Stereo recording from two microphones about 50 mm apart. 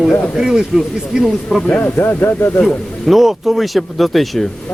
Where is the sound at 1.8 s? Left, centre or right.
Left.